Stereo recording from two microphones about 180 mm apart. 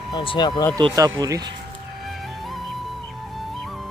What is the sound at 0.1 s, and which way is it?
Speech, 25° left (ahead or behind).